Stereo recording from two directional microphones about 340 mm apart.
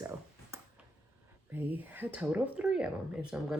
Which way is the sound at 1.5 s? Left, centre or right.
Centre.